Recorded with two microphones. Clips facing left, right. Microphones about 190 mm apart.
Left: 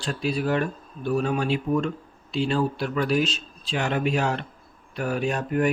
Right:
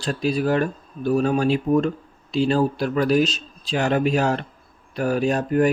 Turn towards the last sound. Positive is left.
turn(degrees=-40)  # may be behind; listen again after turning